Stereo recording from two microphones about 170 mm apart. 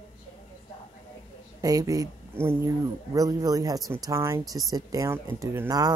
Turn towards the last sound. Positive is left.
turn(degrees=-20)  # may be behind; listen again after turning